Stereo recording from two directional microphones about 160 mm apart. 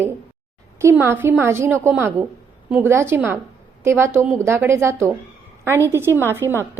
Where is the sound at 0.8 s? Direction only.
15° right (ahead or behind).